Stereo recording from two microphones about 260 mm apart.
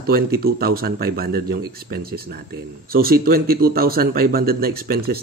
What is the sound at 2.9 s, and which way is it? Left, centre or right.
Speech, right.